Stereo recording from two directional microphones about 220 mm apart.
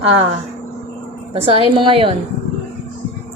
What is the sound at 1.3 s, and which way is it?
Speech, 25° right (ahead or behind).